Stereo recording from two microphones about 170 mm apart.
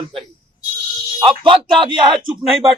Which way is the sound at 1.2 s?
30° right (ahead or behind).